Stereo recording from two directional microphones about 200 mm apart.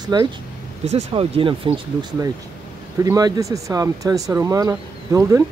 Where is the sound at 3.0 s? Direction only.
15° right (ahead or behind).